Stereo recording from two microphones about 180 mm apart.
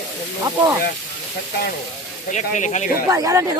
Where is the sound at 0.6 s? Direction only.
25° right (ahead or behind).